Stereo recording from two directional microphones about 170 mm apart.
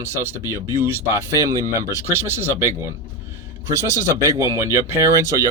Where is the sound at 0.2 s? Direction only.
15° right (ahead or behind).